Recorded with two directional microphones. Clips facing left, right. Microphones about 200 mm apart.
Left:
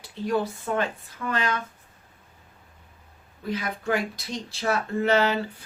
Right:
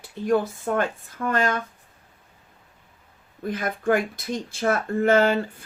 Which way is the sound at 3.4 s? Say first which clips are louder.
Right 4 dB; 50° right (ahead or behind).